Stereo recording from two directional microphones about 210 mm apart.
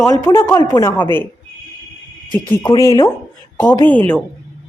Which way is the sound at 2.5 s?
15° left (ahead or behind).